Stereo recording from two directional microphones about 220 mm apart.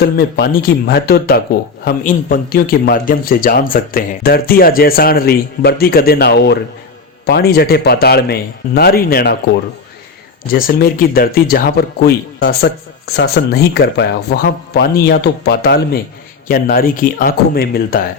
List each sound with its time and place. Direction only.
0.0 s a man's voice: 45° left (ahead or behind)
10.5 s a man's voice: 45° left (ahead or behind)